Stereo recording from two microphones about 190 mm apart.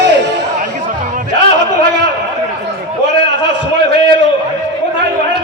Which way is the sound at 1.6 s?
65° right (ahead or behind).